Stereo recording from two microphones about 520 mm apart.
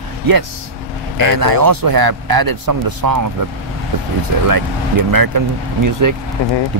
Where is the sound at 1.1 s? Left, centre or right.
Right.